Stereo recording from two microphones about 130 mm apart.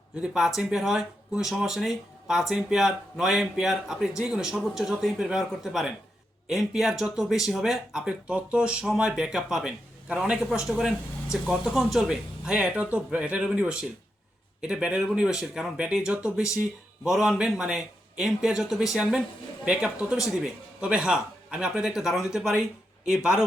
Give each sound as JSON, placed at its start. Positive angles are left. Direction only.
{"t": 0.2, "sound": "speech", "side_deg": -5}